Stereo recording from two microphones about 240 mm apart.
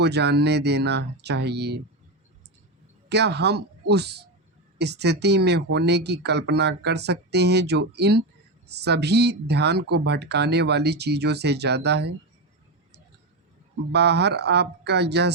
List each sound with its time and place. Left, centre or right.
0.0 s speech: right
3.1 s speech: right
13.9 s speech: right